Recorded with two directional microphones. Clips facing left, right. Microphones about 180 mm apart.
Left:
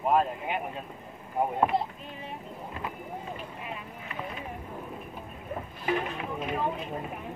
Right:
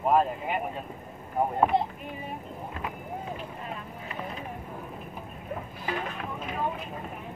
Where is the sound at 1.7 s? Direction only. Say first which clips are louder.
Right 3 dB; 20° right (ahead or behind).